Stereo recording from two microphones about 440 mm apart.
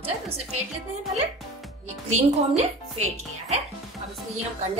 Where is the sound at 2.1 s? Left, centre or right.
Centre.